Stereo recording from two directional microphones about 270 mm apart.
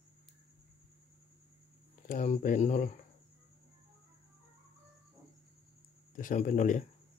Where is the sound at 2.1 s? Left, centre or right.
Left.